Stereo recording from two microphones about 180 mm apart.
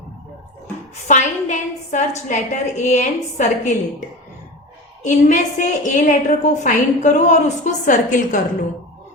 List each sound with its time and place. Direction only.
1.0 s a woman's voice: 40° left (ahead or behind)
5.0 s a woman's voice: 45° left (ahead or behind)